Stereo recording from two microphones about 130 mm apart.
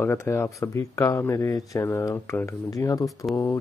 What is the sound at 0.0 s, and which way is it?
Speech, 20° left (ahead or behind).